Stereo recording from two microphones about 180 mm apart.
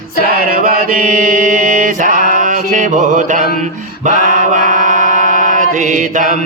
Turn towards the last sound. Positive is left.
turn(degrees=-45)  # may be behind; listen again after turning